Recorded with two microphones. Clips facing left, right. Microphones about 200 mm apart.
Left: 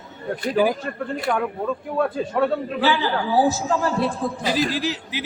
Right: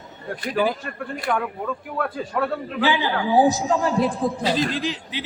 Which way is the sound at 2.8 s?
15° right (ahead or behind).